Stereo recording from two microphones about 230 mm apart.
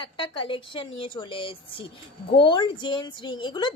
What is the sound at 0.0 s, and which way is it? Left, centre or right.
A woman's voice, left.